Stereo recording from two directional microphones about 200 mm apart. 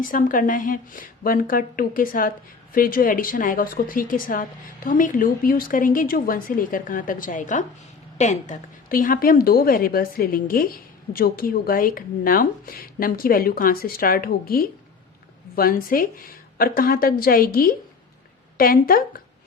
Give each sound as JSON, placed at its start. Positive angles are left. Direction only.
{"t": 0.0, "sound": "a woman's voice", "side_deg": 40}